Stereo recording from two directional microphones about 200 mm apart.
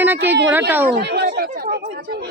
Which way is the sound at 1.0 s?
55° right (ahead or behind).